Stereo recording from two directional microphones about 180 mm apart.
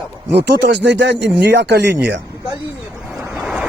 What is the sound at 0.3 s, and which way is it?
Speech, 65° right (ahead or behind).